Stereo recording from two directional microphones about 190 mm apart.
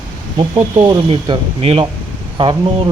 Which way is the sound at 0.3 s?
25° right (ahead or behind).